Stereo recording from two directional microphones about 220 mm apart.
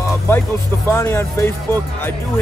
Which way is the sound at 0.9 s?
10° left (ahead or behind).